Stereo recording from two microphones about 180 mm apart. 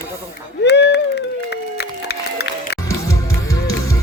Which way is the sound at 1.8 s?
65° left (ahead or behind).